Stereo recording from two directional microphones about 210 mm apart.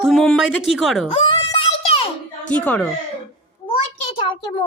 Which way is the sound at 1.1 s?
25° left (ahead or behind).